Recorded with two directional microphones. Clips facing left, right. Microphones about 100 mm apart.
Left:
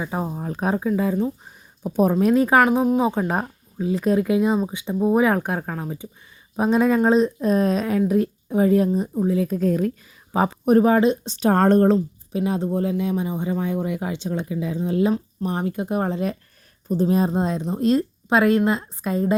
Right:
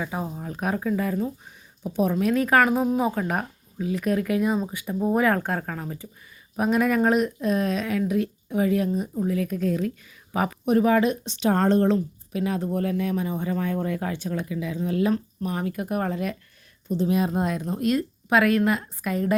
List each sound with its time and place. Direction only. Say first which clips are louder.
0.1 s speech: left 4 dB; 35° left (ahead or behind)
0.8 s speech: left 3 dB; 20° left (ahead or behind)
1.8 s speech: left 5 dB; 45° left (ahead or behind)
2.1 s speech: left 4 dB; 30° left (ahead or behind)
2.6 s speech: left 3 dB; 15° left (ahead or behind)
6.6 s speech: left 3 dB; 25° left (ahead or behind)
10.3 s speech: left 5 dB; 30° left (ahead or behind)
11.3 s speech: left 4 dB; 45° left (ahead or behind)
11.9 s speech: left 3 dB; 25° left (ahead or behind)